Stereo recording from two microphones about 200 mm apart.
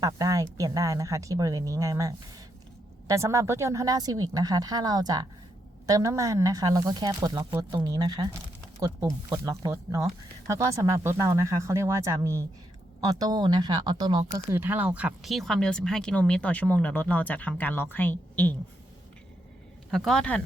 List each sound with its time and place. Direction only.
0.0 s speech: 15° right (ahead or behind); by 18.5 s 10° left (ahead or behind)
19.9 s speech: centre (ahead or behind)